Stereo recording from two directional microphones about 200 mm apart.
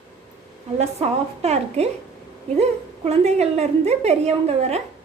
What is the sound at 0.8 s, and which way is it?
A woman's voice, 30° right (ahead or behind).